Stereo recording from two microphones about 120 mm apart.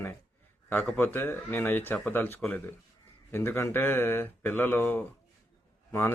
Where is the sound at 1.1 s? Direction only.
20° left (ahead or behind).